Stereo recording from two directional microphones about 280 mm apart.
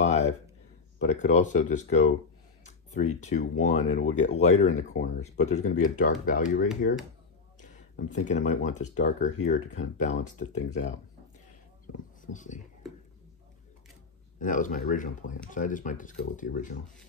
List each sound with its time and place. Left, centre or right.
0.1 s a sound: left
0.9 s speech: left
8.1 s speech: left
12.3 s speech: left
14.4 s speech: left